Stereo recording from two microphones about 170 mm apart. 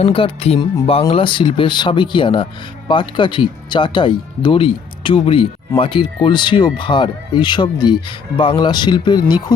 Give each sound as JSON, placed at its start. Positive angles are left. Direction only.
{"t": 0.0, "sound": "speech", "side_deg": 30}